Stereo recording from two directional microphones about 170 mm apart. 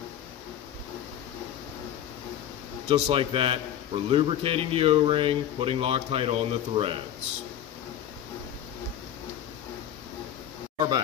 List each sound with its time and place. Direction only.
2.9 s a man's voice: 35° right (ahead or behind)